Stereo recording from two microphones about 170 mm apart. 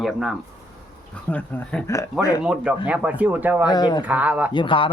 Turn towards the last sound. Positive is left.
turn(degrees=30)  # may be behind; listen again after turning